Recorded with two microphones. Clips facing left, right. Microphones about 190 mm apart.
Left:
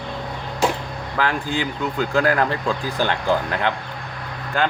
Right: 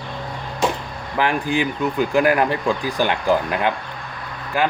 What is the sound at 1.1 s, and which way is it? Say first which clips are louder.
Speech: right 3 dB; 15° right (ahead or behind).